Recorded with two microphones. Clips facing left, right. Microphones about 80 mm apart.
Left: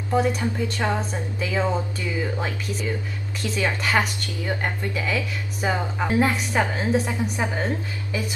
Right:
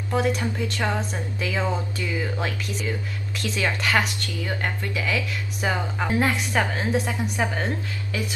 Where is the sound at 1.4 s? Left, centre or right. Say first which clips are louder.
Left 2 dB; centre.